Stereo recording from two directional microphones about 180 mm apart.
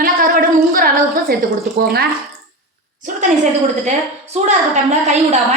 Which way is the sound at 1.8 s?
60° right (ahead or behind).